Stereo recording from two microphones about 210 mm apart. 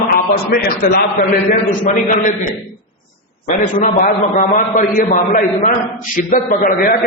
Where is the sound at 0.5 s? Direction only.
45° left (ahead or behind).